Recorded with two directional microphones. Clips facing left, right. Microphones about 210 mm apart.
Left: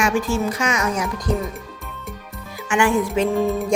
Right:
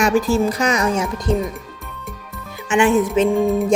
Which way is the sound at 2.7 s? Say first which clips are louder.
Right 3 dB; 20° right (ahead or behind).